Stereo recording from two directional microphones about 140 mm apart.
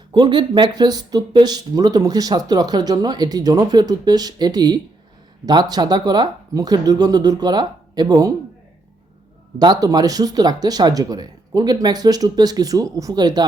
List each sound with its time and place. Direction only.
0.1 s speech: 35° right (ahead or behind)
9.6 s speech: 30° right (ahead or behind)